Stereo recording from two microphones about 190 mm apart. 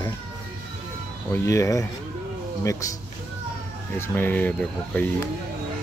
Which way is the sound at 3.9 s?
10° left (ahead or behind).